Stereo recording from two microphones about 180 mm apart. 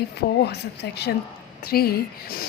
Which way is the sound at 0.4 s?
65° left (ahead or behind).